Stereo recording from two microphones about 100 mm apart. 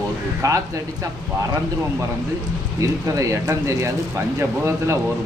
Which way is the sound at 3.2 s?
30° right (ahead or behind).